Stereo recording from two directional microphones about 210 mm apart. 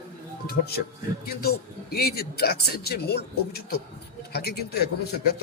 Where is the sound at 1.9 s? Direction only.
50° left (ahead or behind).